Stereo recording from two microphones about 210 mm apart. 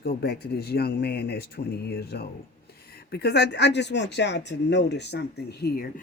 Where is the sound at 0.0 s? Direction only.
50° left (ahead or behind).